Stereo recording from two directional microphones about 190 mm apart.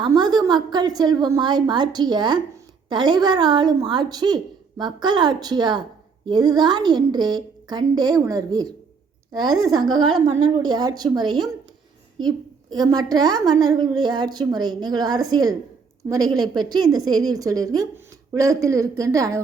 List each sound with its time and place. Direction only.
0.0 s a woman's voice: 20° right (ahead or behind)
12.7 s a woman's voice: 20° right (ahead or behind)